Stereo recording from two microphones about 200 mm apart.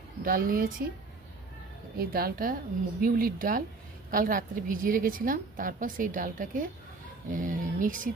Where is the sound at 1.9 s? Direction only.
50° right (ahead or behind).